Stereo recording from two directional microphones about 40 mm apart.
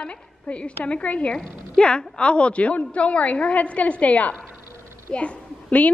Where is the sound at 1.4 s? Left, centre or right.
Centre.